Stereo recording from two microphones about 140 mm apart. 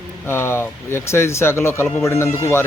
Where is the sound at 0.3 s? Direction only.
15° left (ahead or behind).